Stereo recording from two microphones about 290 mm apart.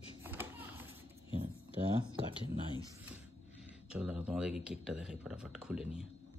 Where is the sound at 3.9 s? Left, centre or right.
Centre.